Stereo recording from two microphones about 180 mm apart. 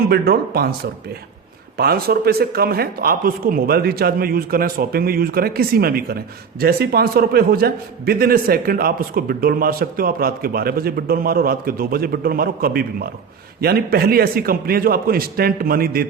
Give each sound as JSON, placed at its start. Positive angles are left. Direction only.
{"t": 0.1, "sound": "speech", "side_deg": -60}
{"t": 1.7, "sound": "speech", "side_deg": -60}